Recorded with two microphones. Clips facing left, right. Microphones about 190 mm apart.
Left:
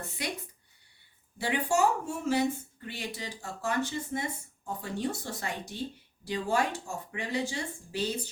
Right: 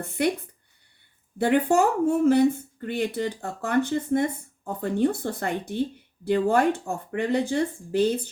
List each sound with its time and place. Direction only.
0.0 s speech: 55° right (ahead or behind)
1.4 s speech: 55° right (ahead or behind)